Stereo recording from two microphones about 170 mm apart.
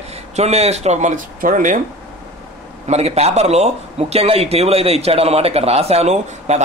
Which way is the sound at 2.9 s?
40° right (ahead or behind).